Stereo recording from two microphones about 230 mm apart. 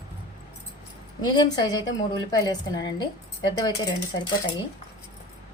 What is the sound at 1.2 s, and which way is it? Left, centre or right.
A woman's voice, centre.